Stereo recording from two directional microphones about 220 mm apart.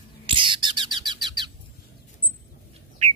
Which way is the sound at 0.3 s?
20° right (ahead or behind).